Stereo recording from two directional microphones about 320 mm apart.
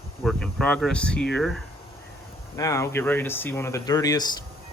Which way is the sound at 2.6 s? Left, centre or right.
Centre.